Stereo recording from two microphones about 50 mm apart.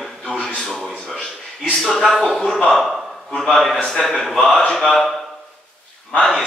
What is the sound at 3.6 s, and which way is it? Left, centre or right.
Speech, centre.